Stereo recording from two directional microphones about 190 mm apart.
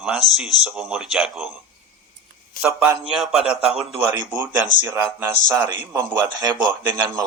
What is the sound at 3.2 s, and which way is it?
A man's voice, centre (ahead or behind).